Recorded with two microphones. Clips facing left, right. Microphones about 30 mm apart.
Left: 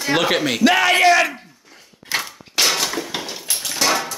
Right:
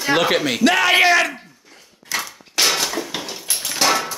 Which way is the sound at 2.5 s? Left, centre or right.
Centre.